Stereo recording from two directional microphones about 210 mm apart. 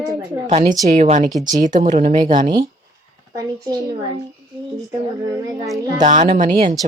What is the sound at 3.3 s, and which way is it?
Speech, 15° right (ahead or behind).